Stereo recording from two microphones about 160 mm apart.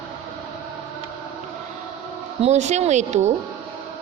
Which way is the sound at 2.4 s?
45° right (ahead or behind).